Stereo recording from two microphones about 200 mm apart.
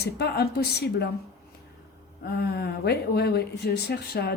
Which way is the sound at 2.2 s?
50° left (ahead or behind).